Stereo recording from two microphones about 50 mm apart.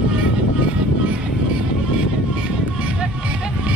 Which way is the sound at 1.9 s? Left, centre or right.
Right.